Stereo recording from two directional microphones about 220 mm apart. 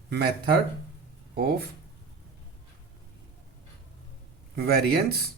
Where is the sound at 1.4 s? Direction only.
45° right (ahead or behind).